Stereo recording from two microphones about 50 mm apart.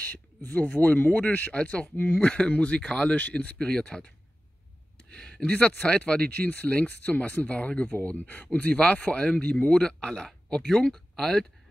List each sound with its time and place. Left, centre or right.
0.0 s a man's voice: left
1.5 s speech: left
5.1 s a sound: centre
5.5 s speech: left
6.3 s speech: left; by 11.4 s centre